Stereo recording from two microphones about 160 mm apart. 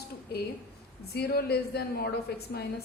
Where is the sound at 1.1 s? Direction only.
80° left.